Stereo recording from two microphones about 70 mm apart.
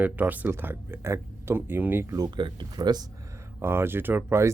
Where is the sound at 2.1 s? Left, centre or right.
Right.